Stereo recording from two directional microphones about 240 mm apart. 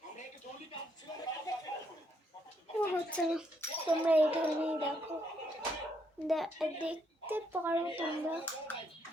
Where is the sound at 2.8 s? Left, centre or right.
Centre.